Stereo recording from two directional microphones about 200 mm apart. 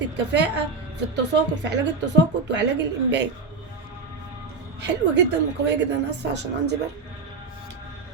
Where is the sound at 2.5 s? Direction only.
60° right (ahead or behind).